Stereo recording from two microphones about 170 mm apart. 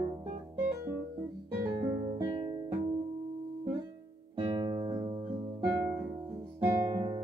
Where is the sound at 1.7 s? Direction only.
30° right (ahead or behind).